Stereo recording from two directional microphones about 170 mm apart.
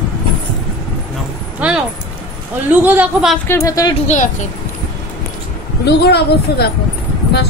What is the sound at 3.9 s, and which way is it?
Speech, 45° left (ahead or behind).